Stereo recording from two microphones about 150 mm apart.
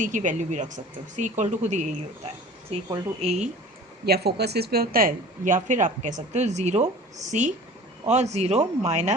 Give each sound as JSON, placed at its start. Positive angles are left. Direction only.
{"t": 0.0, "sound": "speech", "side_deg": -55}
{"t": 3.2, "sound": "speech", "side_deg": -50}
{"t": 4.0, "sound": "speech", "side_deg": -90}